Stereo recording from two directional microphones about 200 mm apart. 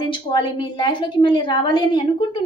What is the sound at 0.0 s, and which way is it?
A woman's voice, 25° left (ahead or behind).